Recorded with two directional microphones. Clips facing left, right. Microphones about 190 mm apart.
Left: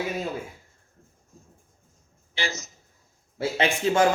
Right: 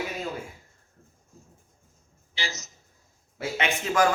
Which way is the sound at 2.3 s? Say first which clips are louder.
Left 5 dB; 55° left (ahead or behind).